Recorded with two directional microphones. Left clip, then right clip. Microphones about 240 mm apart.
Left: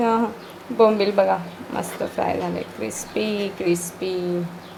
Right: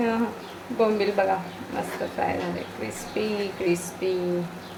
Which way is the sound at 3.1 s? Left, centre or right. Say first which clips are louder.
Left 2 dB; left.